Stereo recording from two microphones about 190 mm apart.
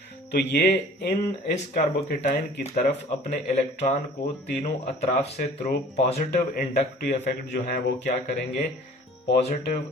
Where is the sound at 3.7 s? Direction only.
35° left (ahead or behind).